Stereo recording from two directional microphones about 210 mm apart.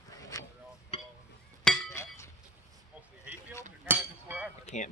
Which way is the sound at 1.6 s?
15° left (ahead or behind).